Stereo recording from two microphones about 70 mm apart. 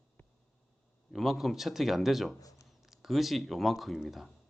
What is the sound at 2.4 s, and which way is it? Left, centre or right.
Shuffling cards, left.